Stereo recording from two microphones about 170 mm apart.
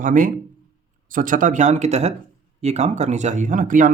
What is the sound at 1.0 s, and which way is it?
Speech, 55° right (ahead or behind).